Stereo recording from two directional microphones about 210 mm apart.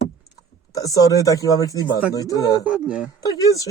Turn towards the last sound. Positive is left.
turn(degrees=15)  # may be behind; listen again after turning